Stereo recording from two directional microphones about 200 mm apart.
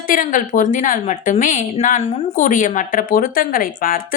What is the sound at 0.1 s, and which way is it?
A woman's voice, 40° left (ahead or behind).